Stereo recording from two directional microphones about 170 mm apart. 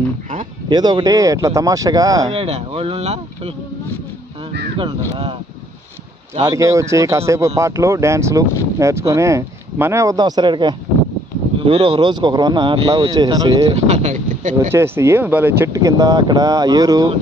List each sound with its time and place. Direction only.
0.7 s speech: 25° right (ahead or behind)
2.3 s speech: 35° right (ahead or behind)
4.7 s speech: 35° right (ahead or behind)
6.4 s speech: 15° right (ahead or behind)
13.8 s speech: 40° right (ahead or behind)
14.7 s speech: 15° right (ahead or behind)